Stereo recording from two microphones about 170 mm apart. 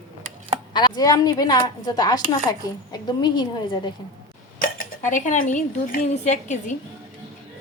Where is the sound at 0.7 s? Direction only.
25° left (ahead or behind).